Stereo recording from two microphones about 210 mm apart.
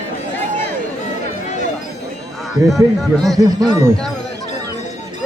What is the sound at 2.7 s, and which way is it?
Speech, centre (ahead or behind).